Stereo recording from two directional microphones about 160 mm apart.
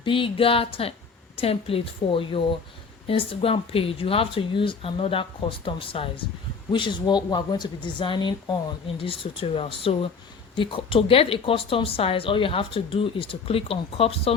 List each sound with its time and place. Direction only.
0.0 s speech: 35° left (ahead or behind)